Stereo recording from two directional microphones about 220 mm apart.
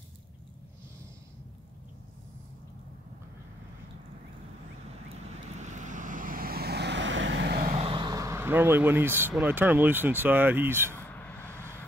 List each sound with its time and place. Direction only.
5.3 s vehicle: 30° right (ahead or behind)
7.7 s speech: 25° right (ahead or behind)
11.0 s a sound: 10° left (ahead or behind)